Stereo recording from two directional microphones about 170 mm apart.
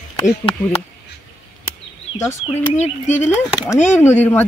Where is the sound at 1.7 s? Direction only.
15° left (ahead or behind).